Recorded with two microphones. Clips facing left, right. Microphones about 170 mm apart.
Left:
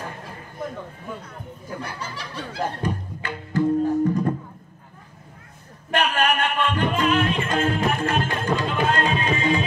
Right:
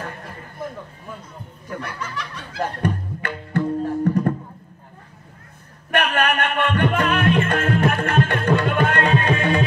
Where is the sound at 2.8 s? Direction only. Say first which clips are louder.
Right 3 dB; 60° right (ahead or behind).